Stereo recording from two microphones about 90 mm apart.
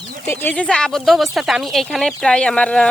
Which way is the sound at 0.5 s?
10° left (ahead or behind).